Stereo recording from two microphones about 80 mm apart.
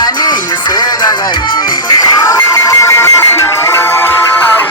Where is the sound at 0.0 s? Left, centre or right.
Left.